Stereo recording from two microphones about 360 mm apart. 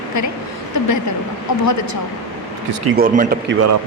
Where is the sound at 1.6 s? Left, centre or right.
Left.